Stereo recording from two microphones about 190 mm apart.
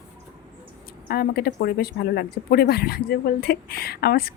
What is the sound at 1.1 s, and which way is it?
Speech, 55° left (ahead or behind).